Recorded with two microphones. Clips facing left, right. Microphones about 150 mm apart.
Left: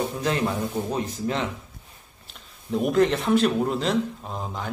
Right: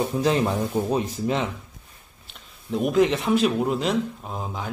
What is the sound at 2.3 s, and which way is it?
A man's voice, centre (ahead or behind).